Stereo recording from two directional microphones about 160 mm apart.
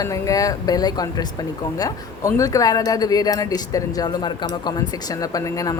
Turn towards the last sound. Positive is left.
turn(degrees=20)  # may be behind; listen again after turning